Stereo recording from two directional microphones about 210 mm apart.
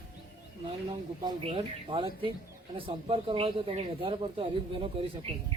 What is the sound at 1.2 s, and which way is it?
Speech, 25° right (ahead or behind).